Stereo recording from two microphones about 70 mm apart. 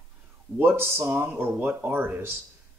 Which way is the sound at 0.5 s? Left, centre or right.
Right.